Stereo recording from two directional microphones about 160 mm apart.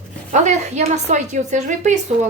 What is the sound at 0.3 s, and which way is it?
Speech, 50° right (ahead or behind).